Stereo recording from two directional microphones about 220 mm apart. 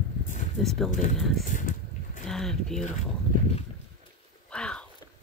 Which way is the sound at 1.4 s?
35° left (ahead or behind).